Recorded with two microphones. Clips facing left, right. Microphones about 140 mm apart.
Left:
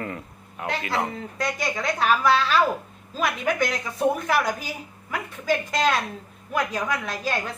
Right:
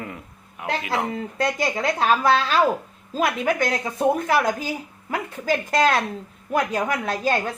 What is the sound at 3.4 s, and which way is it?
Speech, 30° right (ahead or behind).